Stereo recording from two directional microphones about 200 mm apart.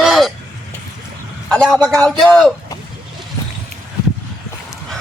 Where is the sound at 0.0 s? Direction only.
Centre (ahead or behind).